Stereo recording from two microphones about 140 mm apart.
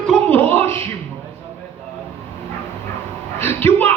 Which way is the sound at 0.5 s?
15° left (ahead or behind).